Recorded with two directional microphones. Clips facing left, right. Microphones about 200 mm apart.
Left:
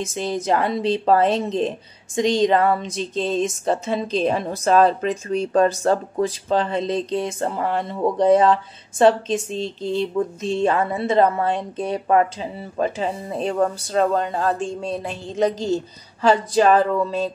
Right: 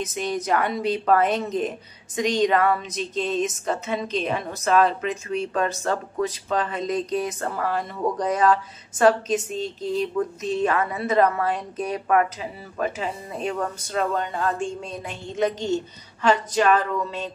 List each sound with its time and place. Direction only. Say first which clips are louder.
0.0 s speech: left 2 dB; 30° left (ahead or behind)